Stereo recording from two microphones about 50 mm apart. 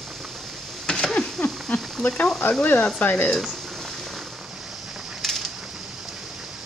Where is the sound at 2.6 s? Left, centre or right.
Left.